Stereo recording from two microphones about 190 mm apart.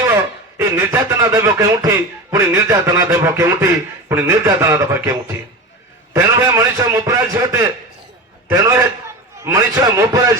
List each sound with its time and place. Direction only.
0.0 s a sound: 15° right (ahead or behind)
2.3 s a man's voice: 15° right (ahead or behind)
6.1 s a man's voice: 15° right (ahead or behind)